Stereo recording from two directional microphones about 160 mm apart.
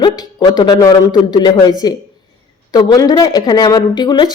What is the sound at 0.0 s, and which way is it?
A woman's voice, 25° left (ahead or behind).